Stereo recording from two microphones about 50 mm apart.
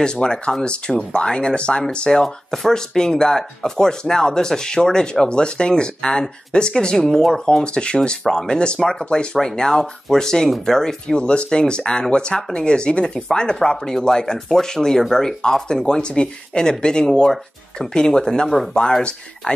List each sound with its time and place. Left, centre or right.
0.0 s speech: centre
2.2 s speech: centre
18.5 s speech: centre
18.8 s speech: centre